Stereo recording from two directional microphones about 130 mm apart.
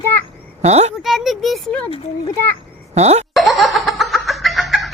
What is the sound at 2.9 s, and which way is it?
Speech, 55° right (ahead or behind).